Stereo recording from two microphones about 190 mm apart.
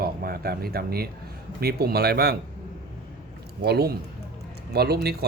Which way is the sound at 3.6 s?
55° right (ahead or behind).